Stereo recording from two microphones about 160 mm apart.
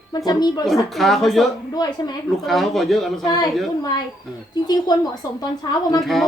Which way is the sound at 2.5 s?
Centre (ahead or behind).